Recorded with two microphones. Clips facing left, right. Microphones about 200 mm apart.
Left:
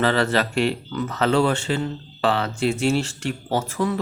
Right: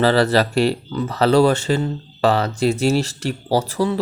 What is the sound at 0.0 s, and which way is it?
Speech, 35° right (ahead or behind).